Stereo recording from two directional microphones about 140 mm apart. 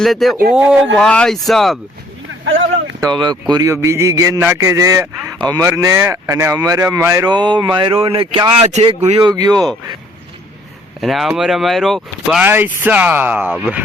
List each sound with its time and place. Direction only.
0.0 s speech: centre (ahead or behind)
3.0 s a man's voice: 30° right (ahead or behind)
7.3 s speech: 30° right (ahead or behind); by 9.2 s 50° right (ahead or behind)
9.2 s a man's voice: 30° right (ahead or behind)
11.0 s speech: centre (ahead or behind)
12.4 s speech: 15° right (ahead or behind)